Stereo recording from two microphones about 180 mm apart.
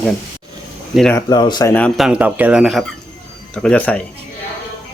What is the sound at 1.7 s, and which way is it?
Speech, 10° left (ahead or behind).